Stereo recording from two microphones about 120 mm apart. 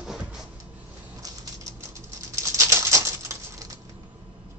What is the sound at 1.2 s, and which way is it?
Pigeon, 30° right (ahead or behind).